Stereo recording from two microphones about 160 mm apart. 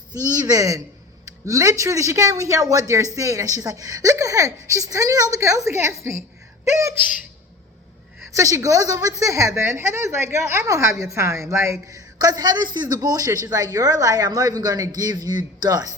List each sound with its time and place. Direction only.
0.3 s speech: 25° right (ahead or behind)
8.4 s speech: 20° right (ahead or behind)